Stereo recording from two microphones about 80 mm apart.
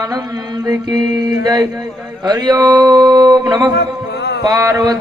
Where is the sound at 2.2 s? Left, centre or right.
Right.